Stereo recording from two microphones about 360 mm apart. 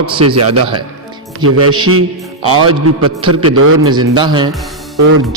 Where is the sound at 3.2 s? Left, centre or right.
Right.